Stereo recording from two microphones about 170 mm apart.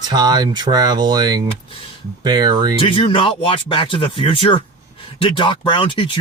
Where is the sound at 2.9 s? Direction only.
30° left (ahead or behind).